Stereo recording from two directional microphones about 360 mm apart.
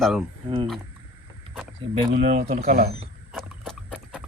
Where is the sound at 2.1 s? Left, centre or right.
Centre.